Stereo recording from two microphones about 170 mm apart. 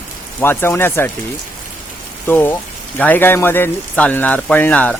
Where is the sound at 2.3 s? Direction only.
10° left (ahead or behind).